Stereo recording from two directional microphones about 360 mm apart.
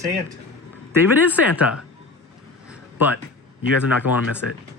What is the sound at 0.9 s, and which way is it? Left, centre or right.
Speech, centre.